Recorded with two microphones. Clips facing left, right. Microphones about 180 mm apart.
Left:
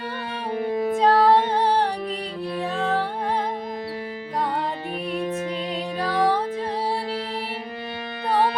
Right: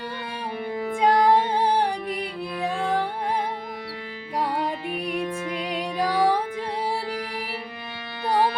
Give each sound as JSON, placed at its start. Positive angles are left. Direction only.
{"t": 0.5, "sound": "music", "side_deg": 40}
{"t": 1.0, "sound": "music", "side_deg": -15}
{"t": 5.7, "sound": "music", "side_deg": -10}